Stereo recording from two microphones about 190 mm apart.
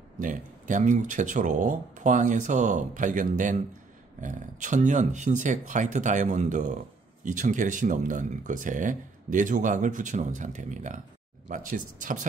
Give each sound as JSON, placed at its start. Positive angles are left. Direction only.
{"t": 0.2, "sound": "speech", "side_deg": -45}